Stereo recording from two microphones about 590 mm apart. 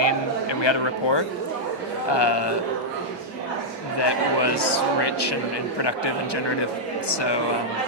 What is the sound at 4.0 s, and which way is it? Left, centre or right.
A man's voice, left.